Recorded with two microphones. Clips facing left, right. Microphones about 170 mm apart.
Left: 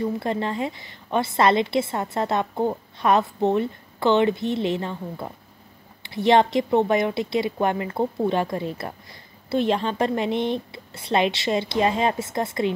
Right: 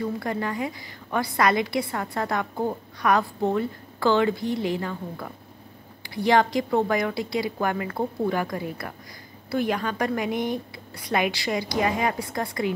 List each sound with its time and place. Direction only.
0.2 s a woman's voice: 25° left (ahead or behind)